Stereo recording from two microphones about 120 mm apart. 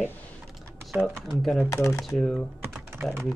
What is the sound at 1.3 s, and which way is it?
Speech, centre (ahead or behind).